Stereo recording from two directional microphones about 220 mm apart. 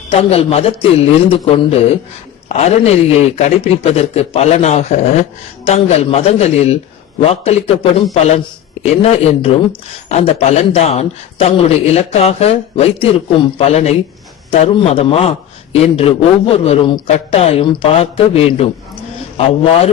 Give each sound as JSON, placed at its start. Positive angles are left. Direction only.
{"t": 0.1, "sound": "a man's voice", "side_deg": 25}